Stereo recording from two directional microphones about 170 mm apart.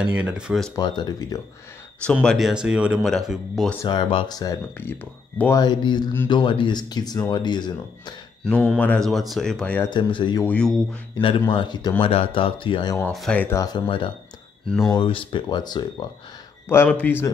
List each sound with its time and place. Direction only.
0.0 s speech: 5° right (ahead or behind)
0.7 s speech: 25° left (ahead or behind)
2.2 s speech: centre (ahead or behind)
3.8 s speech: 25° left (ahead or behind)
8.7 s speech: 10° left (ahead or behind)
9.8 s speech: 30° left (ahead or behind)
10.4 s speech: 5° left (ahead or behind)
11.1 s speech: 30° left (ahead or behind)
13.1 s speech: 5° left (ahead or behind)
13.6 s speech: 25° left (ahead or behind)
14.7 s speech: centre (ahead or behind)
15.0 s speech: 30° left (ahead or behind)
16.6 s speech: 10° left (ahead or behind)